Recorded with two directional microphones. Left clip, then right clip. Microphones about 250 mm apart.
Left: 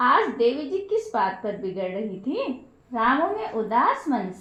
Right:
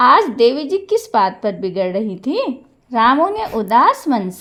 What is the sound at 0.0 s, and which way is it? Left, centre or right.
A woman's voice, right.